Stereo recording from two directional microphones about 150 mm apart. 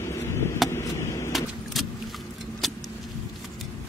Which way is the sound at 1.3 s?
Centre (ahead or behind).